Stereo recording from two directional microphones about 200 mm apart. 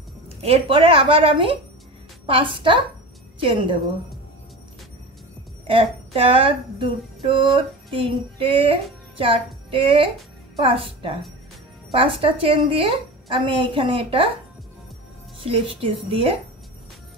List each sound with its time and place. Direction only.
0.4 s a woman's voice: 30° right (ahead or behind)
5.7 s speech: 25° right (ahead or behind)
15.3 s speech: 25° right (ahead or behind)